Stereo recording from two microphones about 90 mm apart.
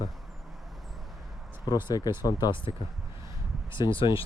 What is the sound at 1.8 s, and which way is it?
Speech, 45° left (ahead or behind).